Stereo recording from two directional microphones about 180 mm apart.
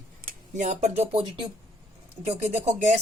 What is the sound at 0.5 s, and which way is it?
Speech, 40° right (ahead or behind).